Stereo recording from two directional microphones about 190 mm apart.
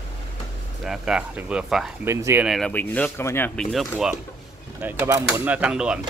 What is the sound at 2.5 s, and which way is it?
Speech, 5° left (ahead or behind).